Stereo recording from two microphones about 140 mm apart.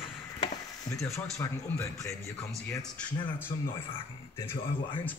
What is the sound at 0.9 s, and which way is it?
Speech, 20° left (ahead or behind).